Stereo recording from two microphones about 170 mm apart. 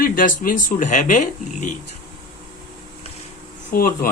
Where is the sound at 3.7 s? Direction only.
60° left (ahead or behind).